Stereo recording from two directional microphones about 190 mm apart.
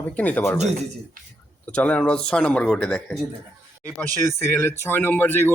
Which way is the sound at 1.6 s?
5° left (ahead or behind).